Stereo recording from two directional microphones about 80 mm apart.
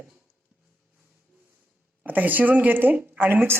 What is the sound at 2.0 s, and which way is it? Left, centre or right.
Speech, right.